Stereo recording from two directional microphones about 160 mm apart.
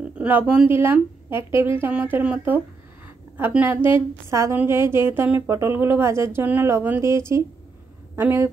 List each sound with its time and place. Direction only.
0.0 s a woman's voice: 10° right (ahead or behind)